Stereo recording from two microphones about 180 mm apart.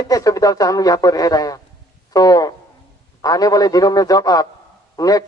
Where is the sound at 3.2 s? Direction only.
20° left (ahead or behind).